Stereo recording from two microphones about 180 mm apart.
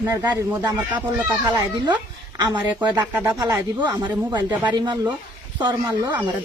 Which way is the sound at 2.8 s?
25° right (ahead or behind).